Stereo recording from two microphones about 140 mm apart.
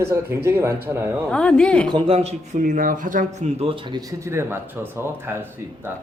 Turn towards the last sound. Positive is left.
turn(degrees=-15)  # may be behind; listen again after turning